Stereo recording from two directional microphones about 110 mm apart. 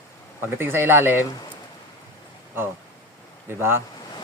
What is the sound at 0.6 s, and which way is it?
Speech, 20° right (ahead or behind).